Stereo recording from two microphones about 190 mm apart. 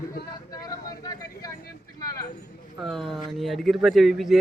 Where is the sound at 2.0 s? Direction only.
20° left (ahead or behind).